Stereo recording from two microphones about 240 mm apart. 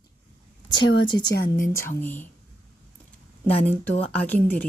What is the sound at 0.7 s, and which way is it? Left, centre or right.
Speech, left.